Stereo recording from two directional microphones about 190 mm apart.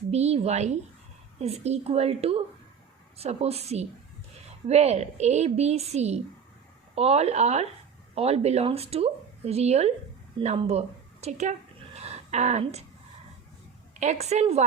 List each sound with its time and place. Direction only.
0.1 s a woman's voice: 35° right (ahead or behind)
11.9 s a sound: 35° right (ahead or behind)
13.9 s speech: 40° right (ahead or behind)